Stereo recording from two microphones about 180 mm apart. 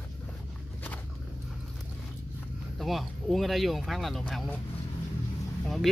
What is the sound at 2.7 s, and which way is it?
Speech, centre (ahead or behind).